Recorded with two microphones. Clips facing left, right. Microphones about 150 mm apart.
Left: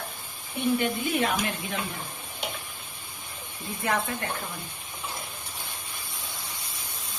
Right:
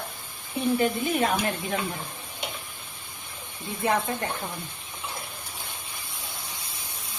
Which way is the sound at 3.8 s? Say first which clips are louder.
Right 3 dB; 30° right (ahead or behind).